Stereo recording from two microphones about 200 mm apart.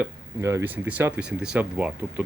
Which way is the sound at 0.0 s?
10° right (ahead or behind).